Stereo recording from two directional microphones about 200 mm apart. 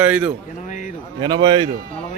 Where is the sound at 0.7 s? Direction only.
40° left (ahead or behind).